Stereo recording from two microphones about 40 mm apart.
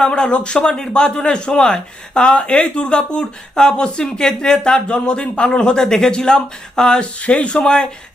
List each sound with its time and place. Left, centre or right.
0.0 s speech: centre